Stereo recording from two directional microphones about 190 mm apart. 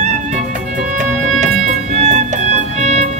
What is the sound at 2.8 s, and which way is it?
Music, 35° right (ahead or behind).